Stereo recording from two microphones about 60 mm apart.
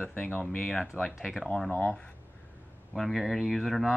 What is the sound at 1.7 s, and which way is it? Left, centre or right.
Speech, centre.